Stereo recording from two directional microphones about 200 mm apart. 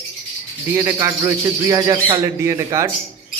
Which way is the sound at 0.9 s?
15° right (ahead or behind).